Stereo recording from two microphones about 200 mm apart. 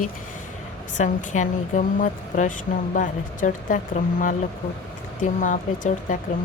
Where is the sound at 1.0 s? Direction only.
40° left (ahead or behind).